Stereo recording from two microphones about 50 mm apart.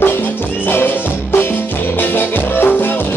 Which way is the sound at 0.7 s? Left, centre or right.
Left.